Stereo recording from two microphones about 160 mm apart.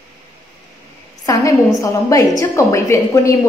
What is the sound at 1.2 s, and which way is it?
A woman's voice, 20° left (ahead or behind).